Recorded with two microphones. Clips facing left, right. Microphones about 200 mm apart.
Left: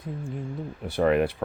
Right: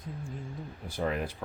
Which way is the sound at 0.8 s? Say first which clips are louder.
Left 10 dB; 70° left (ahead or behind).